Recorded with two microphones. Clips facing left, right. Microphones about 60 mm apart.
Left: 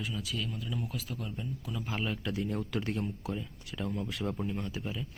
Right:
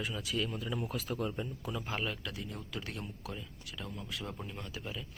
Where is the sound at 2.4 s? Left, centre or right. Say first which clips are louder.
Left 9 dB; left.